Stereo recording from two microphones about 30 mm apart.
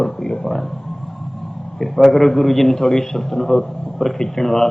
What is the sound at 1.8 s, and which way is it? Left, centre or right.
A man's voice, centre.